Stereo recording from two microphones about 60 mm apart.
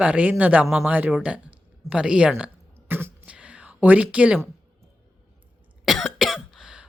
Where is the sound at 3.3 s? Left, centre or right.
Centre.